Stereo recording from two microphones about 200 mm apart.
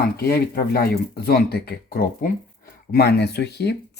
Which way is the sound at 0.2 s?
50° left (ahead or behind).